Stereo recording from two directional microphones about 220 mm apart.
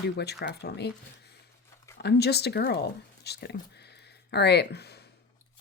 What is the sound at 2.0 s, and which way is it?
Speech, 50° left (ahead or behind).